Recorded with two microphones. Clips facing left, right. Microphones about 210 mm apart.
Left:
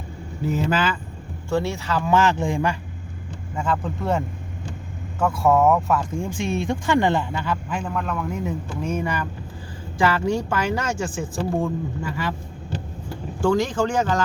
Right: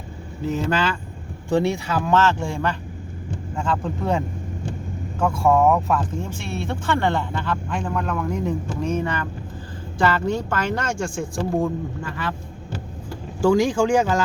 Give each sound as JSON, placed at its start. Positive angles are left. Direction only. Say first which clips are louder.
{"t": 0.4, "sound": "speech", "louder": "even", "side_deg": 10}
{"t": 1.5, "sound": "speech", "louder": "right 3 dB", "side_deg": -15}
{"t": 2.0, "sound": "speech", "louder": "even", "side_deg": 15}
{"t": 5.2, "sound": "speech", "louder": "even", "side_deg": 0}
{"t": 5.9, "sound": "speech", "louder": "even", "side_deg": 10}
{"t": 13.4, "sound": "speech", "louder": "right 3 dB", "side_deg": -10}